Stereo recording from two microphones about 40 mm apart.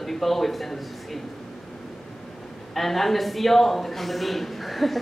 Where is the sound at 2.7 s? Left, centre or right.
Centre.